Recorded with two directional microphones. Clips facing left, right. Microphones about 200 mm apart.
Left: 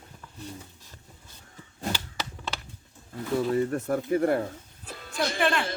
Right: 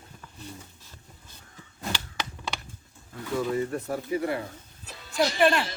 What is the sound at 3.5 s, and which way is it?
Music, 50° left (ahead or behind).